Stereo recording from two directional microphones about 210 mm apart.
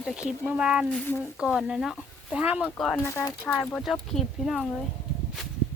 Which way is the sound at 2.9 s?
15° left (ahead or behind).